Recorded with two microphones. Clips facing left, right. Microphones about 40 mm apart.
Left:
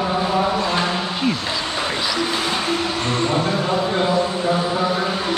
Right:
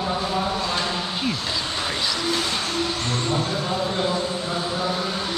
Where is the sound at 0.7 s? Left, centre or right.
Left.